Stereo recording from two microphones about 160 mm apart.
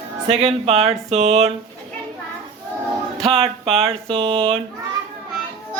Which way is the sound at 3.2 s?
35° right (ahead or behind).